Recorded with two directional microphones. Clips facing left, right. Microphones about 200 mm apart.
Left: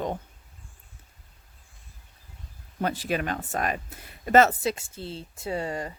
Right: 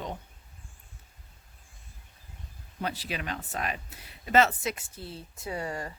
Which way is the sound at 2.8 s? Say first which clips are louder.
Left 7 dB; 50° left (ahead or behind).